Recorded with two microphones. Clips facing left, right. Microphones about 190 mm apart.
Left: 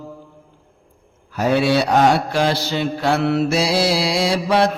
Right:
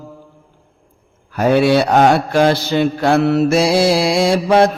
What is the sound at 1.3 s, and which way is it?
Mantra, 55° right (ahead or behind).